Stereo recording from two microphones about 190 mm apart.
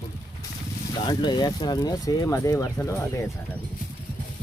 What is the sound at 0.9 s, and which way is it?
Speech, 25° left (ahead or behind).